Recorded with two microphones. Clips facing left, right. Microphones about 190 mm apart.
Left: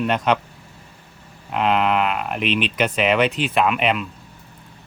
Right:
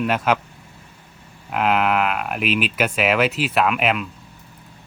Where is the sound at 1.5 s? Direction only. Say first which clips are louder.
Even; 5° right (ahead or behind).